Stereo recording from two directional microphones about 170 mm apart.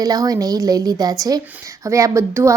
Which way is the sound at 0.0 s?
20° right (ahead or behind).